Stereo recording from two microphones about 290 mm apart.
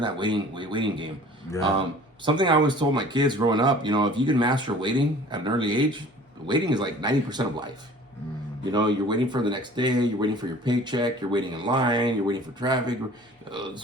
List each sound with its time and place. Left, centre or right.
0.0 s speech: centre
2.2 s speech: centre
8.7 s speech: centre